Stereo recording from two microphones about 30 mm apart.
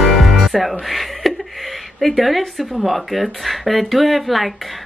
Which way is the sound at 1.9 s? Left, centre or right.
Centre.